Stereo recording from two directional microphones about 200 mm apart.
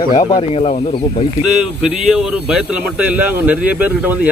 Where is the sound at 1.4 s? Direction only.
Centre (ahead or behind).